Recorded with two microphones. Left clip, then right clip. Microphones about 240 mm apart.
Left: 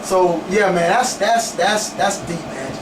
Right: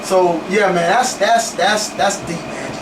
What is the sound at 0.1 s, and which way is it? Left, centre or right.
Speech, centre.